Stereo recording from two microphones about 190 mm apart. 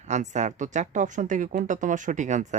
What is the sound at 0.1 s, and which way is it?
Speech, 40° right (ahead or behind).